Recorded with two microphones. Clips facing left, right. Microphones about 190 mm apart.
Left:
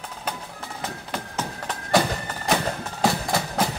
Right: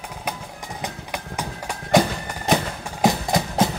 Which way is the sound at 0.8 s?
15° right (ahead or behind).